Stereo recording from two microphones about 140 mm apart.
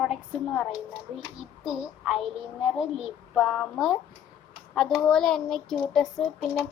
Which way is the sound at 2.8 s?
5° right (ahead or behind).